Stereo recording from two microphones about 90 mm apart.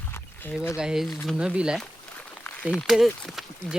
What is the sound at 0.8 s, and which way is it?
Speech, 5° right (ahead or behind).